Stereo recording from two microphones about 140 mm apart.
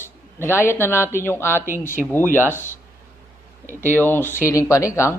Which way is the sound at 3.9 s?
15° left (ahead or behind).